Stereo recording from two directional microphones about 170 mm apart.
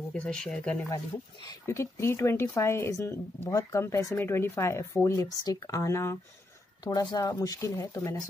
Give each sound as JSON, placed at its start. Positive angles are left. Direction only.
{"t": 0.1, "sound": "speech", "side_deg": 5}